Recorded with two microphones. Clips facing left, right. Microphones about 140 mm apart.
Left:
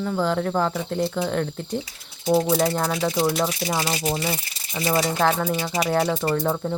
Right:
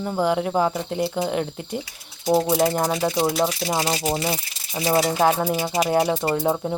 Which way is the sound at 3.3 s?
5° right (ahead or behind).